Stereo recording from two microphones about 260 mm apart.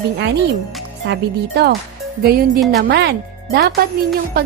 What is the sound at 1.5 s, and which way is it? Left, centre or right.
A woman's voice, right.